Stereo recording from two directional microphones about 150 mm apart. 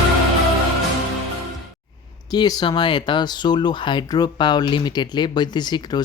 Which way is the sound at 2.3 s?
25° left (ahead or behind).